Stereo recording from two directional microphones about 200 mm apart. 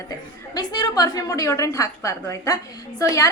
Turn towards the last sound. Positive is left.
turn(degrees=15)  # may be behind; listen again after turning